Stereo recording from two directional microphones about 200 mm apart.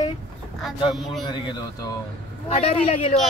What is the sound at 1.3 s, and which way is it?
A man's voice, 20° left (ahead or behind).